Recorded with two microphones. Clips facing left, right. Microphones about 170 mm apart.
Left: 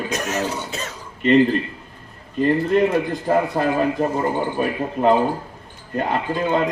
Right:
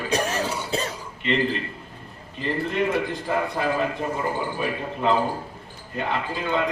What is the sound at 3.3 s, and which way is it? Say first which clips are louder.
A man's voice: left 6 dB; 45° left (ahead or behind).